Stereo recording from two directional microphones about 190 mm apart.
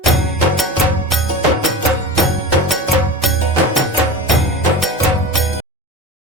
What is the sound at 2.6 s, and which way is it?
Music, centre (ahead or behind).